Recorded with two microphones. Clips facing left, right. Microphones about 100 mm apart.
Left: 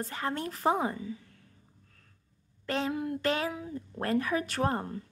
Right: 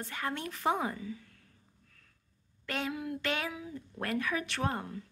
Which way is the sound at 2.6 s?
30° left (ahead or behind).